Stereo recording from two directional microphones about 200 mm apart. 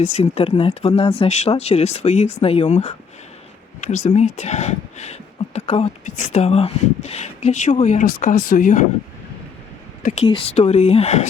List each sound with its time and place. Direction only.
0.0 s speech: 30° left (ahead or behind)
10.0 s speech: 35° left (ahead or behind)